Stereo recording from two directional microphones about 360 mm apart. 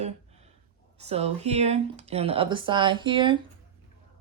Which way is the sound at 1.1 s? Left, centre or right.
Centre.